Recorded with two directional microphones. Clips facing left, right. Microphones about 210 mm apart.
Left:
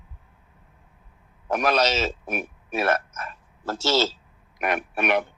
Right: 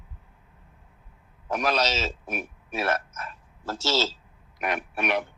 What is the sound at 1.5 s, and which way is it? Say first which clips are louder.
A man's voice: left 4 dB; 55° left (ahead or behind).